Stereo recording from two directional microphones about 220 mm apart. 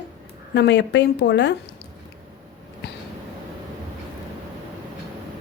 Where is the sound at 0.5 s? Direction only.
55° left (ahead or behind).